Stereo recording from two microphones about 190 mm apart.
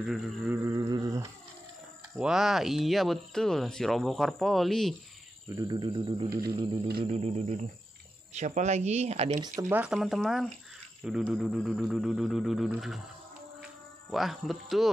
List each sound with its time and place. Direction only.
0.0 s speech: centre (ahead or behind)
0.7 s a sound: 20° right (ahead or behind)
2.1 s speech: 5° right (ahead or behind)
5.5 s a sound: 20° right (ahead or behind)
7.1 s speech: 35° right (ahead or behind)
9.4 s speech: 15° right (ahead or behind)
14.1 s speech: centre (ahead or behind)